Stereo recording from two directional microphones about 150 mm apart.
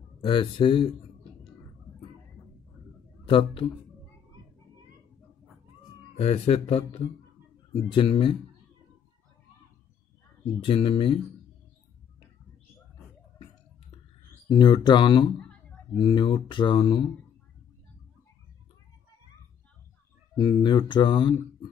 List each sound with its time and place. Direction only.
0.2 s speech: 35° left (ahead or behind)
3.3 s speech: 35° left (ahead or behind)
6.1 s speech: 40° left (ahead or behind)
10.4 s speech: 35° left (ahead or behind)
14.5 s speech: 30° left (ahead or behind)
15.3 s a sound: 5° left (ahead or behind)
16.0 s speech: 30° left (ahead or behind)
20.3 s speech: 30° left (ahead or behind)